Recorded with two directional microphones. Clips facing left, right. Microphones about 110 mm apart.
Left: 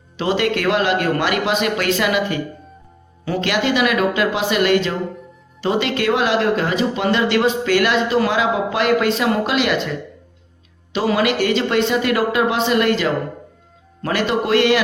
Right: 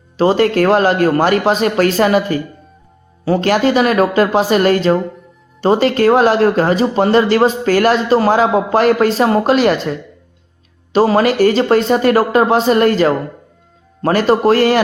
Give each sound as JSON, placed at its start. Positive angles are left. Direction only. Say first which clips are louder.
{"t": 0.2, "sound": "speech", "louder": "right 7 dB", "side_deg": -40}
{"t": 10.9, "sound": "speech", "louder": "right 6 dB", "side_deg": -40}